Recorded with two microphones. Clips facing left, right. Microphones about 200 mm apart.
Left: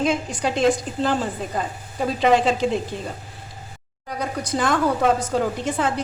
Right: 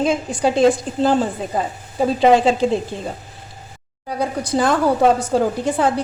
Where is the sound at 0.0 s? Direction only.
30° right (ahead or behind).